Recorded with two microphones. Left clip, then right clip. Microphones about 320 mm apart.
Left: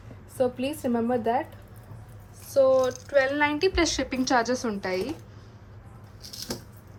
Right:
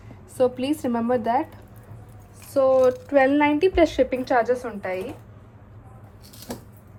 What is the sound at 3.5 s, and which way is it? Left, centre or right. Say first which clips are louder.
A woman's voice: right 6 dB; centre.